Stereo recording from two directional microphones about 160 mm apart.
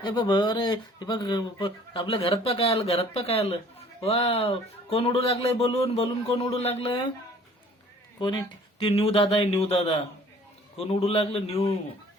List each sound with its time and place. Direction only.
0.0 s speech: 25° left (ahead or behind)
8.8 s speech: 35° left (ahead or behind)